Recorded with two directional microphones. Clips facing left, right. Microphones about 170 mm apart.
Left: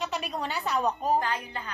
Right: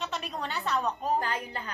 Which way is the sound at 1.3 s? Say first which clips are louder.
Left 1 dB; 35° right (ahead or behind).